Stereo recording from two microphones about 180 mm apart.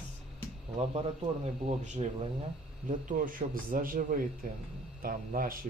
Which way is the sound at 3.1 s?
50° right (ahead or behind).